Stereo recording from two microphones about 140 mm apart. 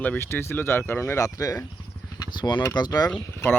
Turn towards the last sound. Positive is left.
turn(degrees=10)  # may be behind; listen again after turning